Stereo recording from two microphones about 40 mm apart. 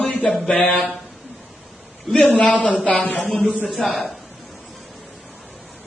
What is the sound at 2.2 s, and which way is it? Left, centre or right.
Speech, left.